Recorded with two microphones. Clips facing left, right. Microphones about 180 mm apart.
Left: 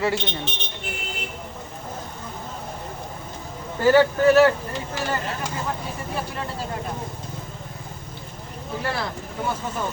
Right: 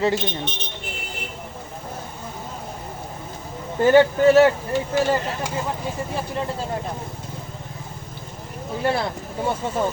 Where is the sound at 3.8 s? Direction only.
25° right (ahead or behind).